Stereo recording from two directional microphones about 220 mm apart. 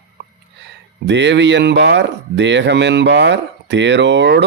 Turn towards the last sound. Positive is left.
turn(degrees=-50)  # may be behind; listen again after turning